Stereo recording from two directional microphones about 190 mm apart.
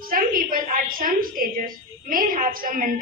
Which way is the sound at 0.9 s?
45° right (ahead or behind).